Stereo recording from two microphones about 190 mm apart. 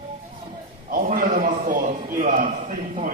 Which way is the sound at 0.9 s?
50° right (ahead or behind).